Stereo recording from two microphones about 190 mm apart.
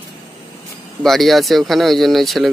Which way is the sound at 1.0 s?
Centre (ahead or behind).